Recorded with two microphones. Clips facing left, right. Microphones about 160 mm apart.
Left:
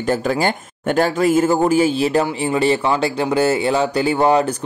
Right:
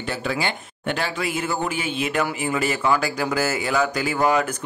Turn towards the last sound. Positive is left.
turn(degrees=30)  # may be behind; listen again after turning